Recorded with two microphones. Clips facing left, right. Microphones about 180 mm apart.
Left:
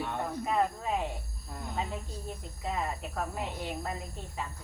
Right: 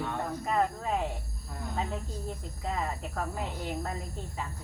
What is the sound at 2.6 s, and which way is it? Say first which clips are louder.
Speech: even; 5° left (ahead or behind).